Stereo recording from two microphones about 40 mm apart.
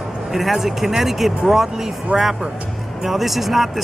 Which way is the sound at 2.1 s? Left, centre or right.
Right.